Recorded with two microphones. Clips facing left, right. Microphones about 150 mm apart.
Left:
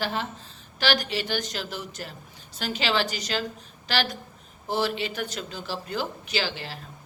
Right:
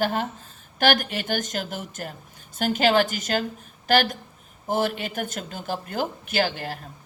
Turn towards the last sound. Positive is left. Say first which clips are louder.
# right 5 dB
turn(degrees=-50)  # may be behind; listen again after turning